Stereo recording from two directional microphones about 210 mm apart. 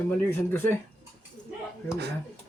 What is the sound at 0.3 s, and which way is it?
Speech, 10° left (ahead or behind).